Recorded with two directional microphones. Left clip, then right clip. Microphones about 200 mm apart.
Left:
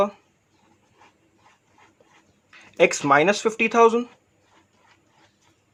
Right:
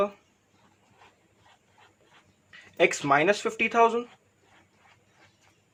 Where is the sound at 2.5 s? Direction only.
40° left (ahead or behind).